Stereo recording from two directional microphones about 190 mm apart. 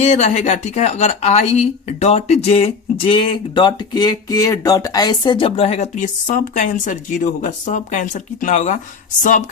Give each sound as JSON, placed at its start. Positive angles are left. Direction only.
{"t": 0.0, "sound": "a woman's voice", "side_deg": 35}